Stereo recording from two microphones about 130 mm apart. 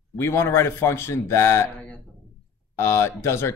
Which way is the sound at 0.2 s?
20° left (ahead or behind).